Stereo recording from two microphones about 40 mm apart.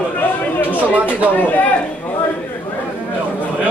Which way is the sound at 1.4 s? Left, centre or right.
Left.